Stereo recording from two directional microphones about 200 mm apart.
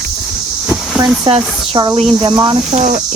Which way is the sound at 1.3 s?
25° right (ahead or behind).